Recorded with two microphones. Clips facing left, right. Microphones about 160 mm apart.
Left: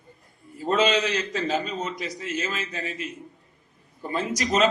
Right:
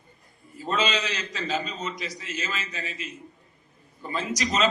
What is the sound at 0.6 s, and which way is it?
A man's voice, 55° left (ahead or behind).